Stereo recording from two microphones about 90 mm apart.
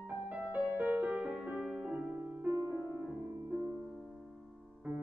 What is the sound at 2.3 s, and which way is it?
Music, 20° right (ahead or behind).